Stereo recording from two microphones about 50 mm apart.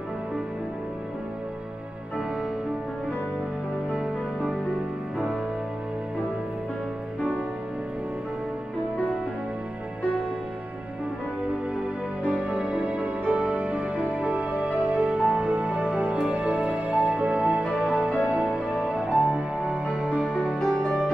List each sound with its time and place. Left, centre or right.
4.0 s music: centre
11.4 s music: right